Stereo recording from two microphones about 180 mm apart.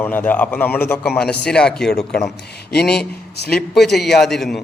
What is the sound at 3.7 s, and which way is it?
Speech, centre (ahead or behind).